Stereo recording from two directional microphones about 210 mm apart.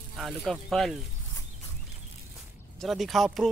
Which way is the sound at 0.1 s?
Centre (ahead or behind).